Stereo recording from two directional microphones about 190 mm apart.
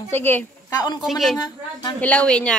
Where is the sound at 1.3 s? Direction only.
20° left (ahead or behind).